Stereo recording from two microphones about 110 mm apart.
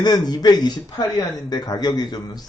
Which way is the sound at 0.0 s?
40° left (ahead or behind).